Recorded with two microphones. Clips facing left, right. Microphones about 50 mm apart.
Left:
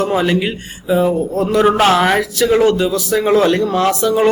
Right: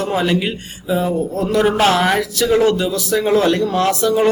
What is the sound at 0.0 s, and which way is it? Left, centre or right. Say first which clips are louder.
A man's voice: left 2 dB; centre.